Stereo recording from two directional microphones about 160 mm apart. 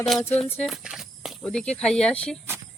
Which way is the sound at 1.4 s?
5° left (ahead or behind).